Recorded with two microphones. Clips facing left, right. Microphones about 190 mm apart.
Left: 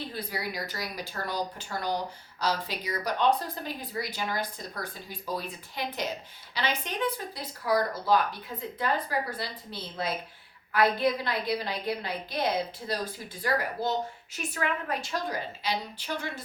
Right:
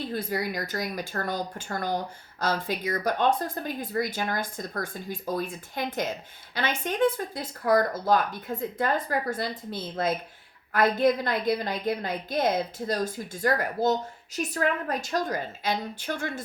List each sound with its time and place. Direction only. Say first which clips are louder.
0.1 s speech: right 6 dB; 50° right (ahead or behind)